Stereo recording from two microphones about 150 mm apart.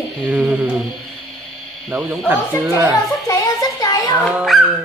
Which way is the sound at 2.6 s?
20° right (ahead or behind).